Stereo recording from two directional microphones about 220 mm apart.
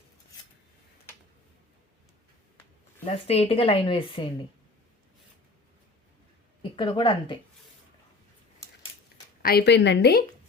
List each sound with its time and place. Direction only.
3.0 s speech: 30° left (ahead or behind)
6.6 s speech: 20° left (ahead or behind)
9.4 s a woman's voice: 45° left (ahead or behind)